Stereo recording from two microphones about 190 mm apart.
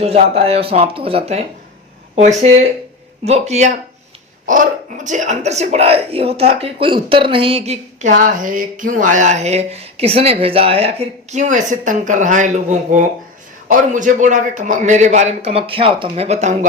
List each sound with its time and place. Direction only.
0.0 s speech: 35° right (ahead or behind)
3.2 s speech: 35° right (ahead or behind)